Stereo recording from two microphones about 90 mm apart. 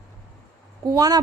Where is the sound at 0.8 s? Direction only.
45° right (ahead or behind).